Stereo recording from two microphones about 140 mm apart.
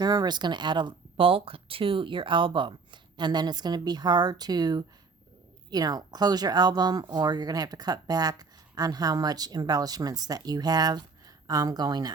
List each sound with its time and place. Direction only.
0.0 s speech: 30° right (ahead or behind)